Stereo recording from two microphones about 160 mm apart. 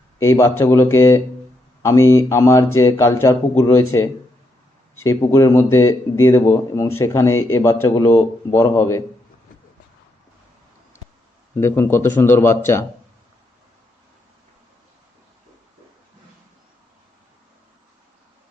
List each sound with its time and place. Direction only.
0.2 s speech: 15° left (ahead or behind)
11.6 s speech: 15° left (ahead or behind)